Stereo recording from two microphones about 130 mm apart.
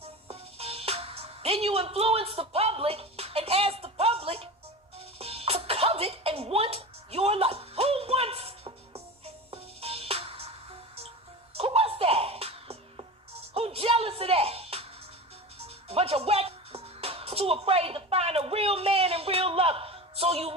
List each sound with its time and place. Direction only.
0.0 s music: 50° right (ahead or behind)
11.5 s music: 50° right (ahead or behind)